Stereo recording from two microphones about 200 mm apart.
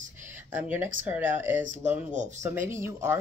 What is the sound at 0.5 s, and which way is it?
Speech, 10° right (ahead or behind).